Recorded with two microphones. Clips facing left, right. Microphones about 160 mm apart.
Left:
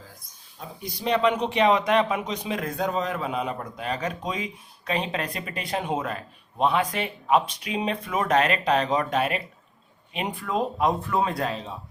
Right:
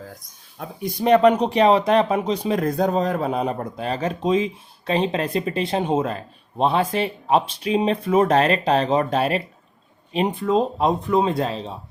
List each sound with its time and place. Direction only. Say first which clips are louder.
0.6 s speech: right 8 dB; 55° right (ahead or behind); by 10.3 s 35° right (ahead or behind)
10.4 s speech: right 3 dB; 25° right (ahead or behind)